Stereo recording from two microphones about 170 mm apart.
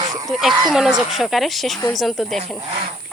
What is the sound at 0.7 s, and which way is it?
Speech, 5° right (ahead or behind).